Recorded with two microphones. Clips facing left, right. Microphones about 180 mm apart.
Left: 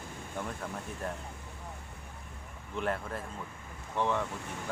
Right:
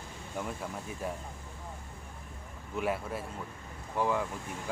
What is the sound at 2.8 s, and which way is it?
Speech, 5° right (ahead or behind).